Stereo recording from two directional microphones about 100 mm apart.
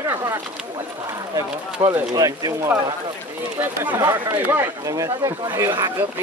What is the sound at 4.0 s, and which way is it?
Speech, 30° right (ahead or behind).